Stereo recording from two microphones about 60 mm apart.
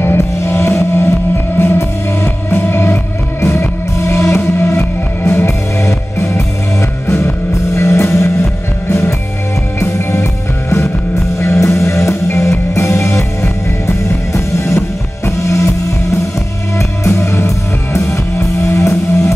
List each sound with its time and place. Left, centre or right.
0.0 s music: left
7.7 s music: left